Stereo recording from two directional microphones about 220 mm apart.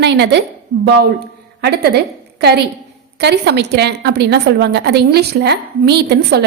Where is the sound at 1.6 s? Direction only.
45° right (ahead or behind).